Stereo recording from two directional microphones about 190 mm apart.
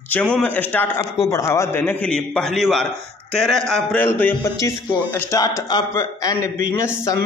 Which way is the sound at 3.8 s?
10° left (ahead or behind).